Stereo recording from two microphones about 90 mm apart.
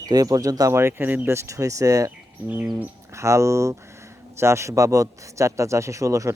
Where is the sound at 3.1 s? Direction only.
35° right (ahead or behind).